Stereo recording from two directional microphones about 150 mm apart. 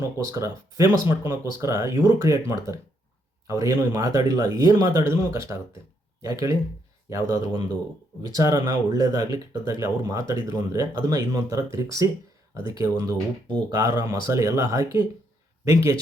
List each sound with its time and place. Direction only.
0.0 s speech: 20° right (ahead or behind)
13.7 s speech: 25° right (ahead or behind)